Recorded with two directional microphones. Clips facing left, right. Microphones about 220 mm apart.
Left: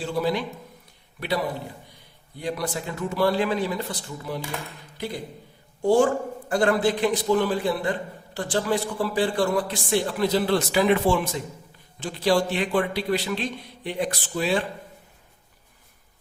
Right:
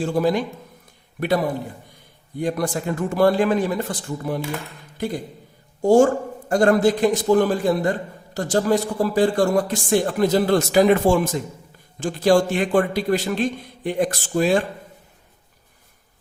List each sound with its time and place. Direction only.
0.0 s a man's voice: 45° right (ahead or behind)
2.4 s a man's voice: 50° right (ahead or behind)